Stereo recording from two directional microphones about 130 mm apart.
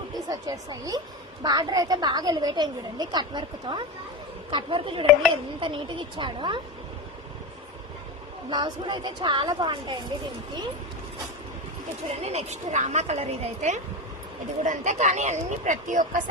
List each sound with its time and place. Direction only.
0.1 s a woman's voice: 30° right (ahead or behind)
8.4 s a woman's voice: 35° right (ahead or behind)
12.2 s speech: 55° right (ahead or behind); by 16.2 s 75° right (ahead or behind)